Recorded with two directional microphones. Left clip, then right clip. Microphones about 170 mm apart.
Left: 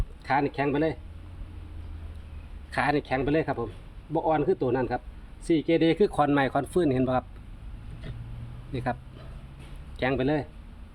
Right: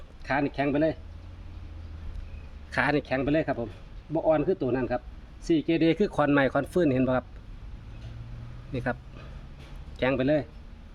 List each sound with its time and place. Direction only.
0.3 s speech: 15° right (ahead or behind)
2.7 s speech: 20° right (ahead or behind)
8.7 s speech: 20° right (ahead or behind)
10.0 s speech: 15° right (ahead or behind)